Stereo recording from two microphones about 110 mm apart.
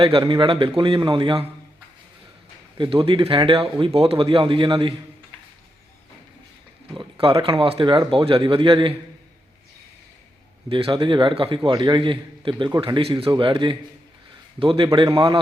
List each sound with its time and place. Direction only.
0.0 s speech: 50° right (ahead or behind)
2.7 s speech: 50° right (ahead or behind)
6.9 s speech: 50° right (ahead or behind)
10.7 s speech: 55° right (ahead or behind)
13.3 s speech: 50° right (ahead or behind)
14.9 s a man's voice: 40° right (ahead or behind)